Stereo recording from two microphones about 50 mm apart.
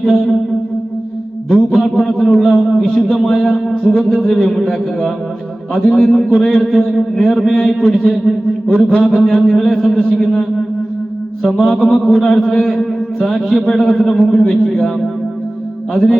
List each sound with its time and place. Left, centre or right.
0.0 s a man's voice: centre
1.5 s a man's voice: centre
11.6 s a man's voice: centre